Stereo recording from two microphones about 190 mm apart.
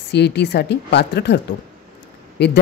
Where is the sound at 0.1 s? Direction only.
60° left (ahead or behind).